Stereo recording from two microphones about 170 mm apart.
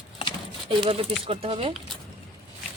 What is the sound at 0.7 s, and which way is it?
Speech, 35° right (ahead or behind).